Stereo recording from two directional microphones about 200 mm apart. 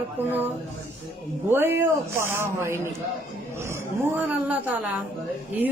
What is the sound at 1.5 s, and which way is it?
Speech, 10° right (ahead or behind).